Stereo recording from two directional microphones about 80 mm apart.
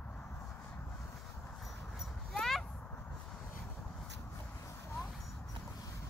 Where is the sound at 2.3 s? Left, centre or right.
Centre.